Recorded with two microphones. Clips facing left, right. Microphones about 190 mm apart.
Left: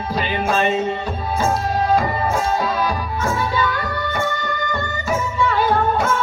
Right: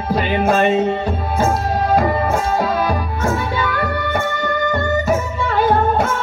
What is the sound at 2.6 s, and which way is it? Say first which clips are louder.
Music: right 3 dB; 55° right (ahead or behind).